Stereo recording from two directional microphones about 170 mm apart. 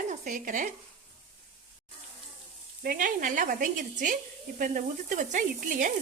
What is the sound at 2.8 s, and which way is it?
A woman's voice, 50° right (ahead or behind).